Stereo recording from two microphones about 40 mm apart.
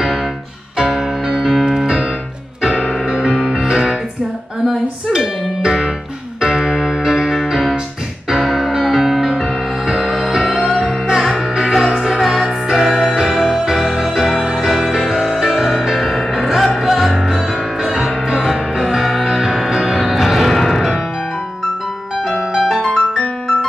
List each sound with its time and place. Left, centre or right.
0.7 s music: centre
1.7 s keyboard: centre
3.4 s music: centre
12.0 s music: centre
16.0 s music: centre
18.4 s music: centre
22.6 s music: centre